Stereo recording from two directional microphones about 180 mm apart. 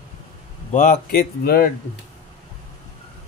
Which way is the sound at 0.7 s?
45° left (ahead or behind).